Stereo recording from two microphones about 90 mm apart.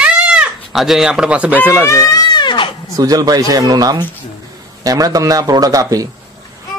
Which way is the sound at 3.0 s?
45° right (ahead or behind).